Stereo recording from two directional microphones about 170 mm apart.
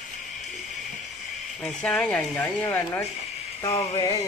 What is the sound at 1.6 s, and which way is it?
Speech, 5° left (ahead or behind).